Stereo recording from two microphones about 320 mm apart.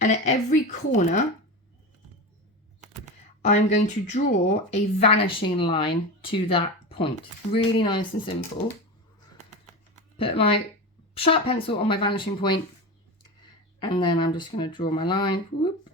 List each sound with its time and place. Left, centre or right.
0.0 s a woman's voice: left
3.4 s a woman's voice: left
10.2 s speech: centre
13.7 s speech: centre